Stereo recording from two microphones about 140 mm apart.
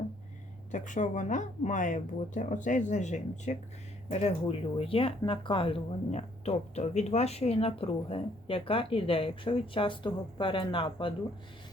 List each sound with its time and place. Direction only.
0.7 s speech: 60° left (ahead or behind)
4.1 s speech: 45° left (ahead or behind)